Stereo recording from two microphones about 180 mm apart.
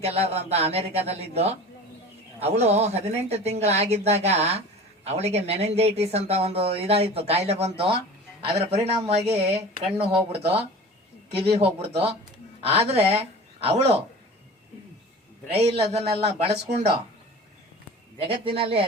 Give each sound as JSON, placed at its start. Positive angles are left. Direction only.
{"t": 0.0, "sound": "speech", "side_deg": -35}
{"t": 15.5, "sound": "speech", "side_deg": -35}
{"t": 18.3, "sound": "speech", "side_deg": -30}